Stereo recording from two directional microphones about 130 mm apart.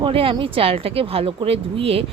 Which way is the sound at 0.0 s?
45° right (ahead or behind).